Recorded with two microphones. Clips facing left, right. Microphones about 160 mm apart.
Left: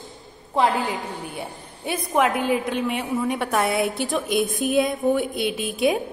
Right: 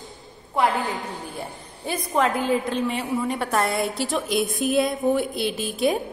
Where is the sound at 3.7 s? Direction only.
65° left (ahead or behind).